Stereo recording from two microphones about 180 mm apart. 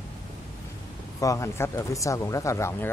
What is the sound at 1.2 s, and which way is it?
Speech, 15° left (ahead or behind).